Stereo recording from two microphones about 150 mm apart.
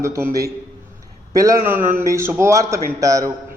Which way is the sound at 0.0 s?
20° right (ahead or behind).